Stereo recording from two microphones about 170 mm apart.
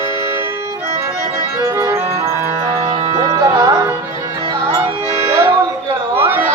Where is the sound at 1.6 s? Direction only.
15° right (ahead or behind).